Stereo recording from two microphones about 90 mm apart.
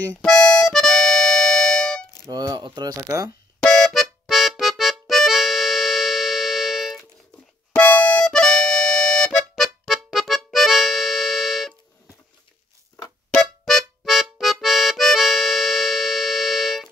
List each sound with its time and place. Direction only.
0.2 s music: 5° left (ahead or behind)
2.2 s speech: 45° right (ahead or behind)
3.0 s speech: 40° right (ahead or behind)
3.6 s music: 5° left (ahead or behind)
7.7 s harmonica: 15° left (ahead or behind); by 11.7 s centre (ahead or behind)
13.3 s music: 5° left (ahead or behind)